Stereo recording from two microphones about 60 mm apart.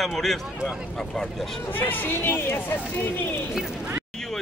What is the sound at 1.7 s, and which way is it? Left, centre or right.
Speech, left.